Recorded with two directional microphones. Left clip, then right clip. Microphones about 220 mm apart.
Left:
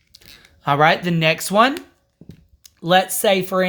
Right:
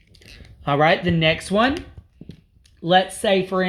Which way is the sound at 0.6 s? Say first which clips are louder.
Left 2 dB; 35° left (ahead or behind).